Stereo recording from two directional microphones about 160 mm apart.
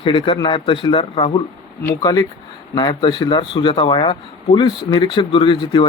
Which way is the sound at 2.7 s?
30° left (ahead or behind).